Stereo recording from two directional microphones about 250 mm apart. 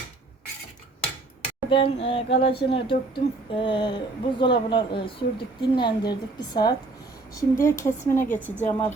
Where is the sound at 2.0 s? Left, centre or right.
Left.